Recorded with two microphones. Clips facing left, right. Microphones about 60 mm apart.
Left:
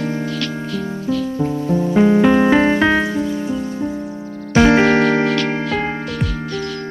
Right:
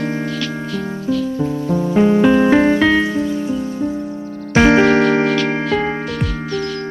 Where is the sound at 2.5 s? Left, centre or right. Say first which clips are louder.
Right 1 dB; left.